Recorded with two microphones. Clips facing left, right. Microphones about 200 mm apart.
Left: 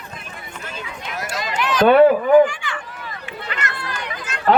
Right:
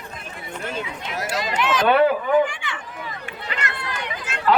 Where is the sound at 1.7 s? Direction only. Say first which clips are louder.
Left 6 dB; 45° left (ahead or behind).